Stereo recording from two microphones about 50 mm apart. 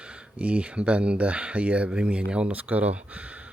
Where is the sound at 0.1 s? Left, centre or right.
Right.